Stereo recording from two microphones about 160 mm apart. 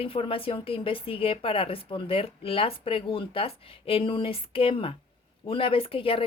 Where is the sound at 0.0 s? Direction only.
35° left (ahead or behind).